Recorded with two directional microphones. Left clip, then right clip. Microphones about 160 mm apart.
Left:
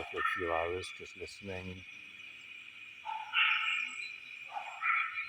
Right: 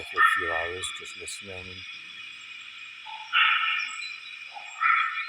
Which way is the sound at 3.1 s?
35° right (ahead or behind).